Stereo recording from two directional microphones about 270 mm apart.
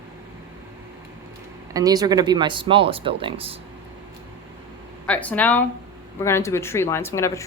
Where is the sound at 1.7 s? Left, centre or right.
Centre.